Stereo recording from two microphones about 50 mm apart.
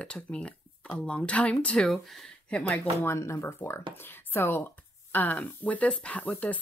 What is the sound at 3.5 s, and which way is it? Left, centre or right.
Speech, left.